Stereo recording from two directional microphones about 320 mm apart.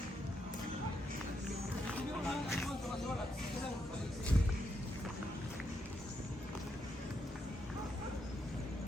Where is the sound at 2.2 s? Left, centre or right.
Centre.